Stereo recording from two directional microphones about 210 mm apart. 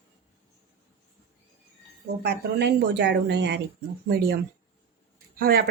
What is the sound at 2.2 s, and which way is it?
A woman's voice, 55° right (ahead or behind).